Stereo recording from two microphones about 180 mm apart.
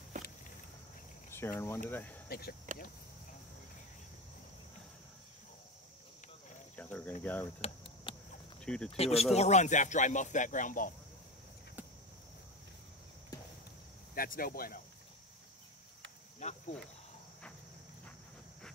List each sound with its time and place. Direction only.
0.1 s walk: 45° right (ahead or behind)
1.3 s speech: 15° left (ahead or behind)
2.2 s speech: 60° left (ahead or behind)
6.8 s speech: 10° left (ahead or behind)
7.6 s a sound: 30° left (ahead or behind)
8.5 s speech: 5° left (ahead or behind)
8.9 s speech: 35° left (ahead or behind)
14.1 s speech: 55° left (ahead or behind)
16.3 s cricket: 40° left (ahead or behind)